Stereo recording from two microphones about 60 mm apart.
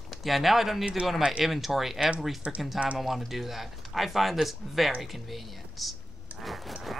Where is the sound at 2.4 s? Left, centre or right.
Right.